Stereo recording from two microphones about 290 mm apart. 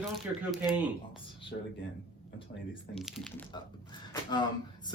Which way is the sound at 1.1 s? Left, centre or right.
Centre.